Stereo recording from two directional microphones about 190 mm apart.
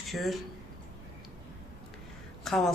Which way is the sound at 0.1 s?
Centre (ahead or behind).